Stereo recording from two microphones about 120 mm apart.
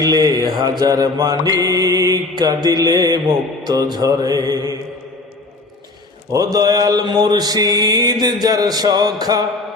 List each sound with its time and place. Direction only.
0.0 s mantra: 30° right (ahead or behind)
6.3 s mantra: 30° right (ahead or behind)